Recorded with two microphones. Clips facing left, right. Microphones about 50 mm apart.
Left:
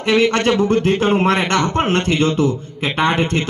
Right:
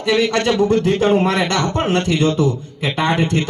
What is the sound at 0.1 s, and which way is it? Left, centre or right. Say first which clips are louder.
A man's voice: left 1 dB; left.